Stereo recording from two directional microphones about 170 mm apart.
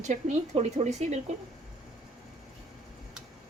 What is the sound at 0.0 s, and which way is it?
Speech, 40° right (ahead or behind).